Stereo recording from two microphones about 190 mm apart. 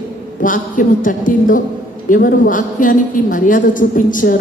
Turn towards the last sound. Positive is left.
turn(degrees=45)  # may be behind; listen again after turning